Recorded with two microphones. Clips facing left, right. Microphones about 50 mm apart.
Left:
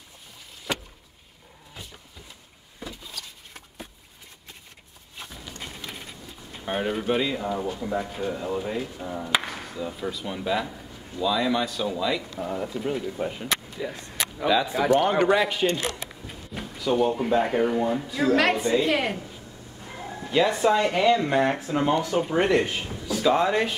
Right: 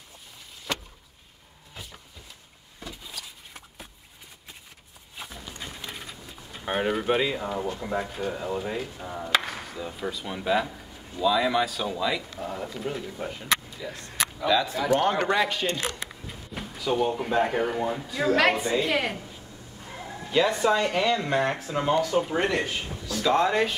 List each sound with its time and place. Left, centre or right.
0.7 s vehicle: centre
2.8 s vehicle: centre
5.1 s a sound: centre
6.6 s speech: centre
7.8 s speech: centre
8.3 s a woman's voice: centre
9.3 s chop: centre
9.9 s a woman's voice: centre
15.0 s a woman's voice: centre
19.9 s bow-wow: left
20.2 s speech: centre
22.0 s a woman's voice: centre